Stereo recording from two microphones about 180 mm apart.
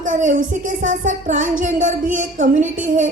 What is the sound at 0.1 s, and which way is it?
Speech, 45° right (ahead or behind).